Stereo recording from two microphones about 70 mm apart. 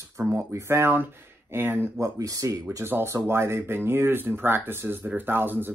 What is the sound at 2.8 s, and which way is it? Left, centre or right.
Speech, right.